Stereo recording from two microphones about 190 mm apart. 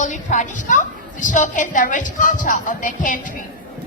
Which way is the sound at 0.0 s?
40° left (ahead or behind).